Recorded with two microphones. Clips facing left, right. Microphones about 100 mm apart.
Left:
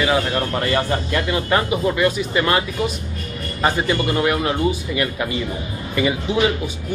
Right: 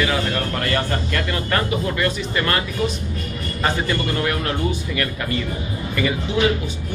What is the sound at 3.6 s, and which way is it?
Speech, 20° left (ahead or behind).